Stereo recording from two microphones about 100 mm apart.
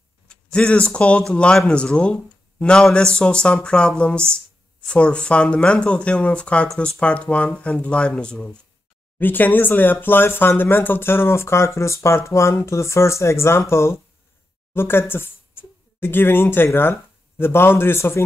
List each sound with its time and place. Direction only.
0.3 s speech: 10° left (ahead or behind)